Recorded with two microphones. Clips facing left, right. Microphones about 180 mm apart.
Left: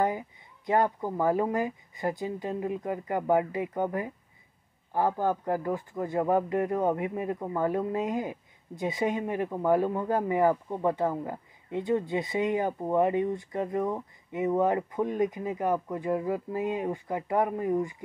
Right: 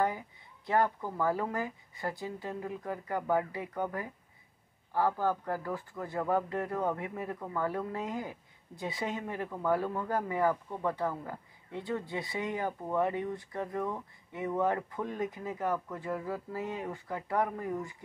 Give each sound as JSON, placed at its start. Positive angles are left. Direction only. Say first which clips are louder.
{"t": 0.7, "sound": "speech", "louder": "left 4 dB", "side_deg": 20}